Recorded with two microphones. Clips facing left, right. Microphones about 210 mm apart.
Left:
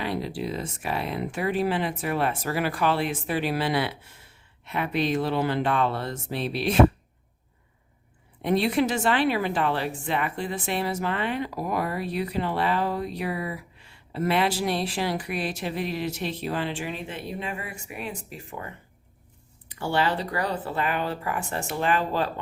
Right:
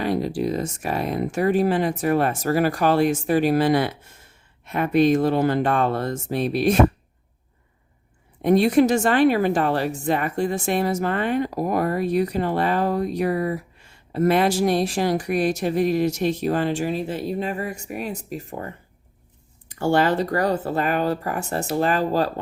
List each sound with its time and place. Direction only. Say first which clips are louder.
0.0 s a woman's voice: right 6 dB; 45° right (ahead or behind)
8.4 s a woman's voice: right 7 dB; 45° right (ahead or behind)